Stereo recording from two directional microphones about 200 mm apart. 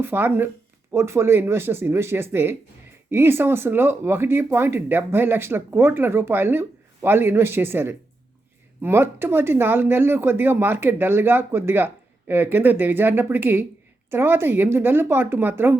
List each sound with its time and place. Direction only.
0.0 s speech: 10° right (ahead or behind)